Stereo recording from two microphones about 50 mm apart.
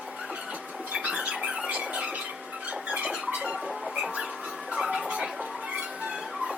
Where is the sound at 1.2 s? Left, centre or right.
Right.